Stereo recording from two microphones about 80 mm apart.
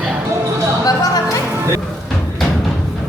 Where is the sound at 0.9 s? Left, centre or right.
Left.